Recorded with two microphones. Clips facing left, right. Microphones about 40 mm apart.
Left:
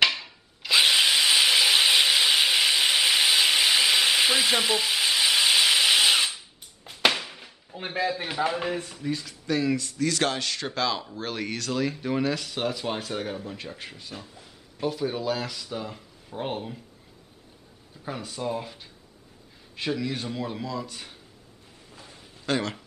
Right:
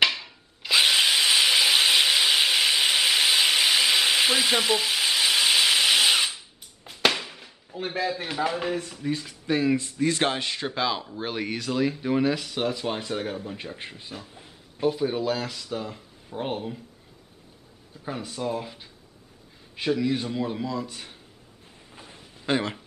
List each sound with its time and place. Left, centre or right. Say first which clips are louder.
0.0 s tools: even; centre
0.7 s drill: even; centre
9.5 s a man's voice: right 2 dB; right; by 14.3 s centre
14.8 s speech: right 3 dB; centre
18.0 s speech: right 1 dB; centre
21.9 s a sound: right 1 dB; right